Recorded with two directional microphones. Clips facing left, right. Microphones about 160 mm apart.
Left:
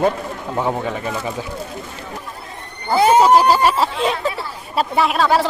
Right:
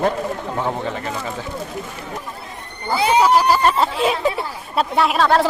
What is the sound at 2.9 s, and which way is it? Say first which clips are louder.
Speech: left 4 dB; 45° left (ahead or behind).